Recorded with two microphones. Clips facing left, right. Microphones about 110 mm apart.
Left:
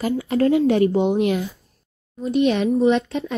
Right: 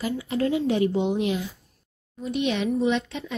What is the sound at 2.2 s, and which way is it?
Speech, 40° left (ahead or behind).